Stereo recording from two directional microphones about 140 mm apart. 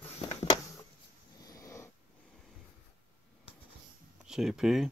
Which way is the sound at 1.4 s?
25° left (ahead or behind).